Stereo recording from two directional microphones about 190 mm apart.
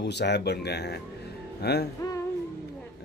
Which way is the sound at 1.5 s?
60° left (ahead or behind).